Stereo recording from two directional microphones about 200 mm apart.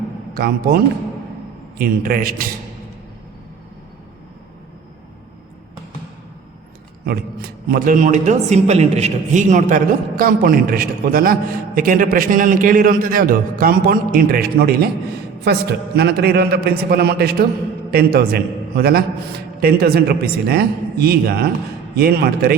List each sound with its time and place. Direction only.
0.3 s a man's voice: 50° right (ahead or behind)
1.8 s a man's voice: 45° right (ahead or behind)
7.0 s a man's voice: 50° right (ahead or behind)